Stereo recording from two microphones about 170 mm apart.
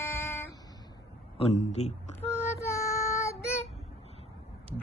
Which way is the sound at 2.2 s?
15° left (ahead or behind).